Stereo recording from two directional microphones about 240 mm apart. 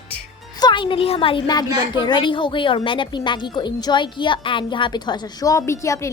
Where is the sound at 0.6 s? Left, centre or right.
Centre.